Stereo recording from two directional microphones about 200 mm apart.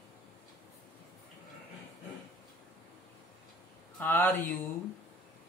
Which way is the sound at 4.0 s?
10° left (ahead or behind).